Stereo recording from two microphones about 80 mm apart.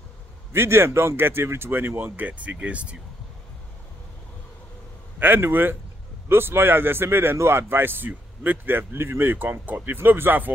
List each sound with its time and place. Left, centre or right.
0.5 s speech: right; by 3.0 s centre
5.2 s speech: right